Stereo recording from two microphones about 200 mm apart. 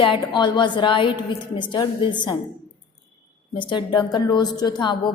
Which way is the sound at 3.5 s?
25° left (ahead or behind).